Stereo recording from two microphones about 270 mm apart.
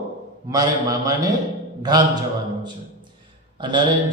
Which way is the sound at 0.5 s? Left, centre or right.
Centre.